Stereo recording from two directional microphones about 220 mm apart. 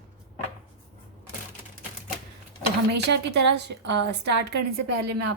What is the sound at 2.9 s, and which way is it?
A woman's voice, 50° right (ahead or behind).